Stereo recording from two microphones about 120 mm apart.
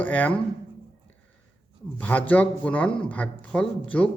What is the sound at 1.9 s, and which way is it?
Speech, 15° left (ahead or behind).